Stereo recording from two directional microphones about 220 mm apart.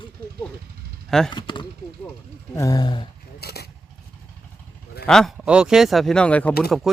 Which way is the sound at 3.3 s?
45° left (ahead or behind).